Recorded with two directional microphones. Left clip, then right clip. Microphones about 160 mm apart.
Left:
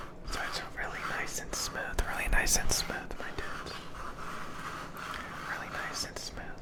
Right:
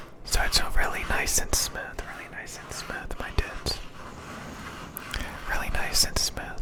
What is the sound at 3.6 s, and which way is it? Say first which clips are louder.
Whispering: right 10 dB; 80° right.